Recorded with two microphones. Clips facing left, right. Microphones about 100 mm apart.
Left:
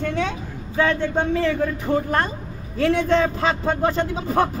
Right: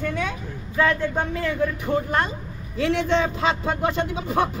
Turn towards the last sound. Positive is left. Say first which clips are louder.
# left 2 dB
turn(degrees=35)  # may be behind; listen again after turning